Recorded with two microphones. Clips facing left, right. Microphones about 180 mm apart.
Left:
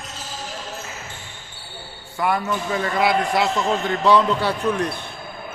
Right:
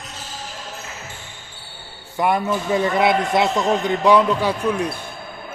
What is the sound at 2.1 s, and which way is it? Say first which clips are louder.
A man's voice: right 3 dB; 20° right (ahead or behind).